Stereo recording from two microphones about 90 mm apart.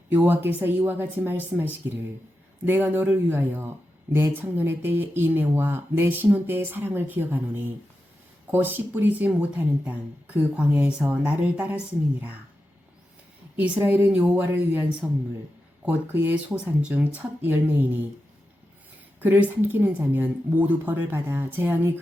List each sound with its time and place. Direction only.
0.1 s speech: 25° right (ahead or behind)
13.6 s speech: 20° right (ahead or behind)
19.2 s speech: 20° right (ahead or behind)